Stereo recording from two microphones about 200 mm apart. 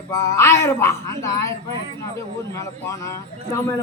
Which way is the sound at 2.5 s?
15° left (ahead or behind).